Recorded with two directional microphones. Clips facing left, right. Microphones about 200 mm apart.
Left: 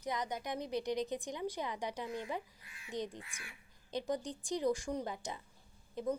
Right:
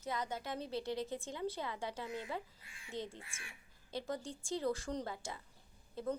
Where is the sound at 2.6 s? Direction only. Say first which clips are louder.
Left 1 dB; 25° right (ahead or behind).